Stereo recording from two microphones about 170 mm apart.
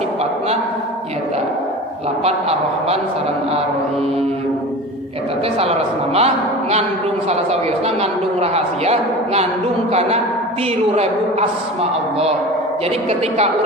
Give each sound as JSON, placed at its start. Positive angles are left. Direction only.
{"t": 0.2, "sound": "a sound", "side_deg": -35}
{"t": 2.2, "sound": "a man's voice", "side_deg": -35}
{"t": 6.1, "sound": "a man's voice", "side_deg": -40}